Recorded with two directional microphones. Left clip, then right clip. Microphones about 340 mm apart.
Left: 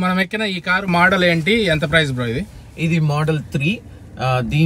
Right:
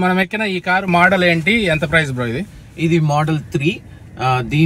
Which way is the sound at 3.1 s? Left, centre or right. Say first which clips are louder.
Right 3 dB; centre.